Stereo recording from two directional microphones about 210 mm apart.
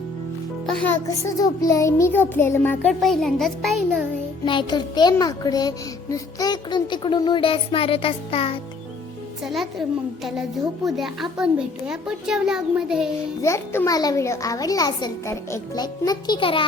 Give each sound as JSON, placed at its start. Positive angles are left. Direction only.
{"t": 0.9, "sound": "a child's voice", "side_deg": 15}
{"t": 4.4, "sound": "a child's voice", "side_deg": 20}
{"t": 9.4, "sound": "a child's voice", "side_deg": 0}
{"t": 10.8, "sound": "a child's voice", "side_deg": 0}
{"t": 13.4, "sound": "a child's voice", "side_deg": 15}